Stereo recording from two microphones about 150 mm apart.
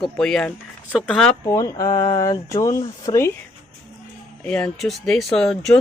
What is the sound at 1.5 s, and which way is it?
Speech, 20° left (ahead or behind).